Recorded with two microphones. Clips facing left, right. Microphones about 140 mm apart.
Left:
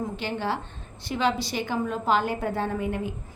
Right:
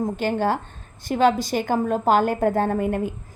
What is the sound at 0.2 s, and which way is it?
A woman's voice, 45° right (ahead or behind).